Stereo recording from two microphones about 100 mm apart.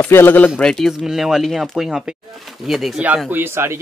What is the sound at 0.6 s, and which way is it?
Speech, 5° left (ahead or behind).